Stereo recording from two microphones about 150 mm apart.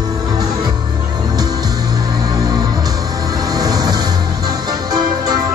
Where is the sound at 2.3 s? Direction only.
25° right (ahead or behind).